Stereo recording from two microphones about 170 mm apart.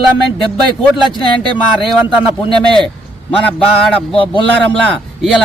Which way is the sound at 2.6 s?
5° left (ahead or behind).